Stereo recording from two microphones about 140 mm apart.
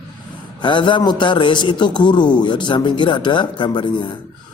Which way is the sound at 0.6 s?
35° left (ahead or behind).